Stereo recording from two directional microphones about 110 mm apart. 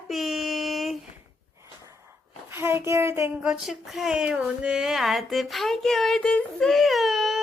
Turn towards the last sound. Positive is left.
turn(degrees=0)  # may be behind; listen again after turning